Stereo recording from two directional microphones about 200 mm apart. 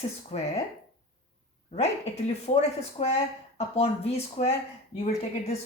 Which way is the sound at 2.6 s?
30° left (ahead or behind).